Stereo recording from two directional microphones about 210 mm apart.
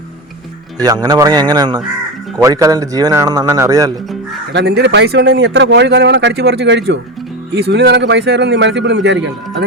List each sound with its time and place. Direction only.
1.0 s a man's voice: 20° right (ahead or behind)
4.5 s a man's voice: 50° right (ahead or behind)